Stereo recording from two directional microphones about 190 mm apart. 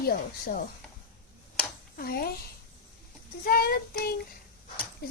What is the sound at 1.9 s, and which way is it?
Child singing, 55° left (ahead or behind).